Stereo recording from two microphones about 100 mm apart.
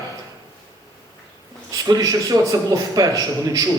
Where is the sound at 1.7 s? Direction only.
40° right (ahead or behind).